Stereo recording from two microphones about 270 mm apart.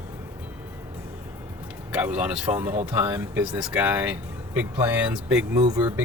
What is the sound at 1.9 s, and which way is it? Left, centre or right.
Speech, centre.